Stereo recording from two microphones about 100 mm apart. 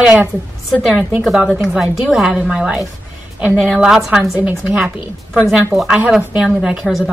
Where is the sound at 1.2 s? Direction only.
5° right (ahead or behind).